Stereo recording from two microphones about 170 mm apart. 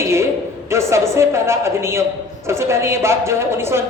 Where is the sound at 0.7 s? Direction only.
15° right (ahead or behind).